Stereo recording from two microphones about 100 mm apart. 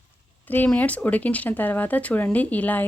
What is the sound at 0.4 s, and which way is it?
Speech, 15° left (ahead or behind).